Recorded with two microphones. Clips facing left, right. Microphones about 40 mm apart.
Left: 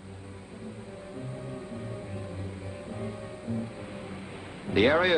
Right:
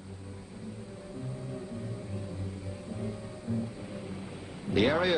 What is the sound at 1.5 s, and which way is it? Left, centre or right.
Music, left.